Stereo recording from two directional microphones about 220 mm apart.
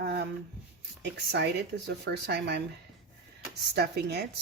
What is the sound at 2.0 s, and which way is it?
Speech, 50° right (ahead or behind).